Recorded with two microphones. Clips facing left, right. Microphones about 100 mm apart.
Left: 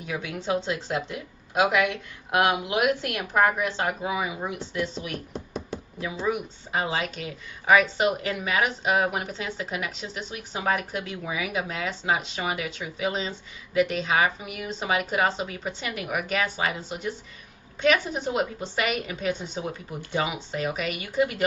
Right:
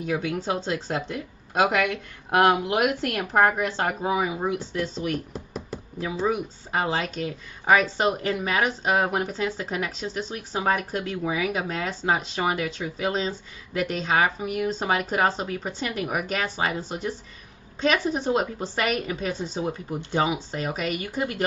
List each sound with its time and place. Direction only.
0.1 s speech: 35° right (ahead or behind)
5.1 s a sound: centre (ahead or behind)
6.7 s speech: 45° right (ahead or behind)